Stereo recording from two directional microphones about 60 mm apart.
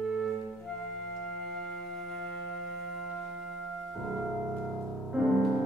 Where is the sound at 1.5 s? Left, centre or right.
Centre.